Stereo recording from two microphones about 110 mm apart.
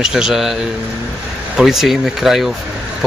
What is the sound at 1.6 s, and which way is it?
Speech, 5° right (ahead or behind).